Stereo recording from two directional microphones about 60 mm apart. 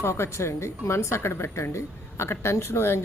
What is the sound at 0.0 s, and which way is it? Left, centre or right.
A woman's voice, left.